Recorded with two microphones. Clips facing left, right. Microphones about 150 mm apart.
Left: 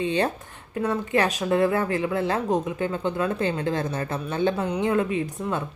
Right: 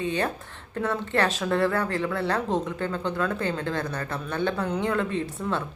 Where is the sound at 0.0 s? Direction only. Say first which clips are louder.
Left 3 dB; 20° left (ahead or behind).